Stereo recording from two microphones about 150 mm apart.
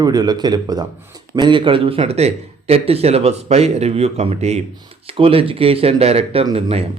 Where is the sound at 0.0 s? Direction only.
25° right (ahead or behind).